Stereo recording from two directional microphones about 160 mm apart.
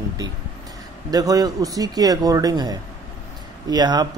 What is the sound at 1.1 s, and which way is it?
Speech, 25° right (ahead or behind).